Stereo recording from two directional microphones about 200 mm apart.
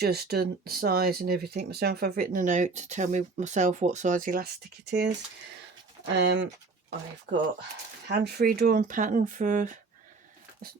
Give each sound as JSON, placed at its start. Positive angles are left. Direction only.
{"t": 0.0, "sound": "speech", "side_deg": -55}
{"t": 4.9, "sound": "speech", "side_deg": -55}
{"t": 6.1, "sound": "speech", "side_deg": -60}
{"t": 8.0, "sound": "speech", "side_deg": -55}